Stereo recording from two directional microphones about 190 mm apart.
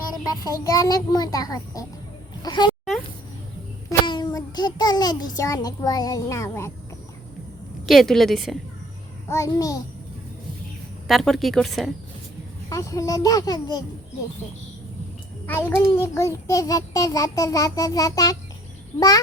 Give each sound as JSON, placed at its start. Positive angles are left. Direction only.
{"t": 0.1, "sound": "a child's voice", "side_deg": 20}
{"t": 3.8, "sound": "a child's voice", "side_deg": 25}
{"t": 7.9, "sound": "a woman's voice", "side_deg": 0}
{"t": 9.3, "sound": "a child's voice", "side_deg": 15}
{"t": 11.1, "sound": "a woman's voice", "side_deg": 0}
{"t": 12.6, "sound": "a child's voice", "side_deg": 15}
{"t": 15.4, "sound": "a child's voice", "side_deg": 10}